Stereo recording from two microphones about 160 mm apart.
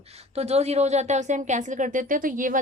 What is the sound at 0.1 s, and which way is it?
Speech, 40° right (ahead or behind).